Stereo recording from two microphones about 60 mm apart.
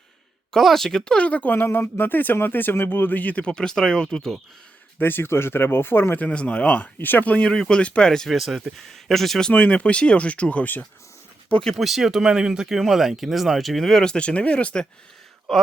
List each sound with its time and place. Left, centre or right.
0.5 s speech: centre
4.9 s speech: left
6.1 s speech: left
7.5 s speech: centre
9.5 s speech: left
11.6 s speech: centre